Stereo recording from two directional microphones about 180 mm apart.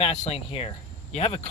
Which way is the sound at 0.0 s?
35° left (ahead or behind).